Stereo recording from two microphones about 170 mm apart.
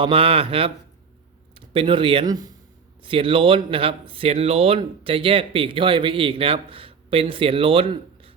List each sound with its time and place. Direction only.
0.0 s speech: 35° right (ahead or behind)